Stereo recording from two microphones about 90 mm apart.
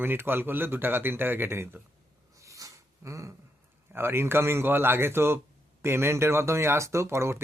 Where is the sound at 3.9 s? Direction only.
25° right (ahead or behind).